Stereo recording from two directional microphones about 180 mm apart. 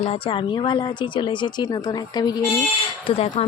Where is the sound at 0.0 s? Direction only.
30° left (ahead or behind).